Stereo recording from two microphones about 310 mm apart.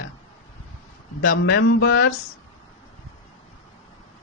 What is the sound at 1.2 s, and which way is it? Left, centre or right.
Speech, left.